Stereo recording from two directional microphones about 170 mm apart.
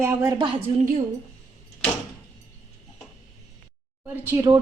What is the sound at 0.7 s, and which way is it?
Speech, 50° right (ahead or behind).